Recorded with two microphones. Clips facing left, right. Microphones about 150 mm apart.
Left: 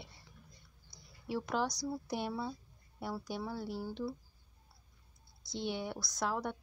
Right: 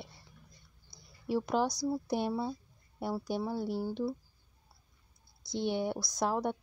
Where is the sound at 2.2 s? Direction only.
20° right (ahead or behind).